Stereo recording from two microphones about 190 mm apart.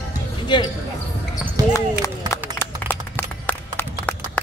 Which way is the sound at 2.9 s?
10° left (ahead or behind).